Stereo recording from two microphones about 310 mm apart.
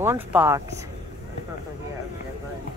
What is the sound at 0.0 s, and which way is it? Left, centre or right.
Speech, centre.